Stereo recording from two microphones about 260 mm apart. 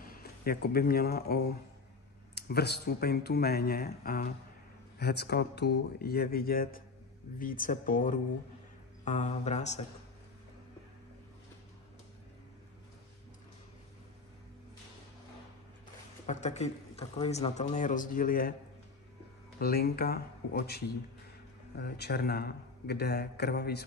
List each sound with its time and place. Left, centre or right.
0.0 s a man's voice: left
16.3 s speech: left
19.6 s a man's voice: left